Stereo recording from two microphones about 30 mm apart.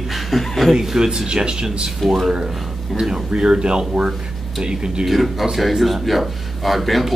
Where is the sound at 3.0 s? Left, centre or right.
Right.